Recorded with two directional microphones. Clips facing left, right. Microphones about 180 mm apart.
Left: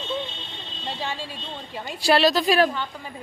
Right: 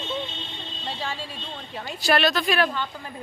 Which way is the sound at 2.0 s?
30° left (ahead or behind).